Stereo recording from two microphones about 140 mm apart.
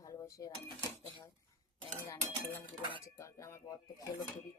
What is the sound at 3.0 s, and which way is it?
Speech, 20° left (ahead or behind).